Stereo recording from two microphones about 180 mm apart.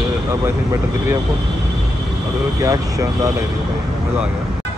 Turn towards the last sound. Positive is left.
turn(degrees=-20)  # may be behind; listen again after turning